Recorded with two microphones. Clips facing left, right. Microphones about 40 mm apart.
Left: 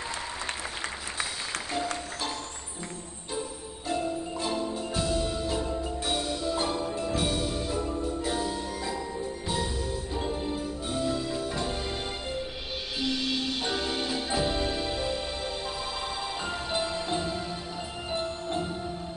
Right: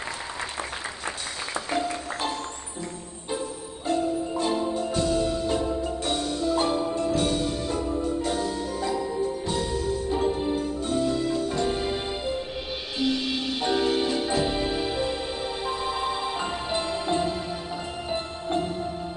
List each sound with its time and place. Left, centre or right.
3.3 s music: centre
4.5 s music: centre
4.7 s music: centre
6.6 s music: centre
7.0 s music: centre
10.0 s music: centre
10.5 s music: centre
11.6 s music: centre
13.6 s music: centre